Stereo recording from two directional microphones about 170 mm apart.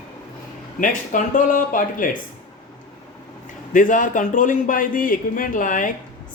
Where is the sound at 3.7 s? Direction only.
50° left (ahead or behind).